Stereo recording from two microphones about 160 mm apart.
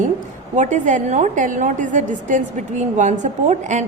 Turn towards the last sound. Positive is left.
turn(degrees=-50)  # may be behind; listen again after turning